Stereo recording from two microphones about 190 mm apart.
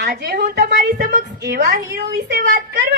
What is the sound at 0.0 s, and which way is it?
A woman's voice, 60° right (ahead or behind).